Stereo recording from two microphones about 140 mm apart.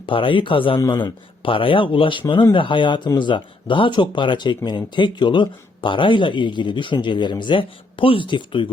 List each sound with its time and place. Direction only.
0.0 s speech: 40° left (ahead or behind)